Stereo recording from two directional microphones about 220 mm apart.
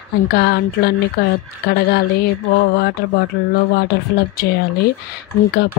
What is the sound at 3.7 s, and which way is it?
Speech, 45° left (ahead or behind).